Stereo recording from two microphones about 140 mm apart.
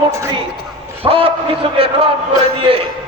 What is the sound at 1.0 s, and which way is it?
A man's voice, 40° right (ahead or behind).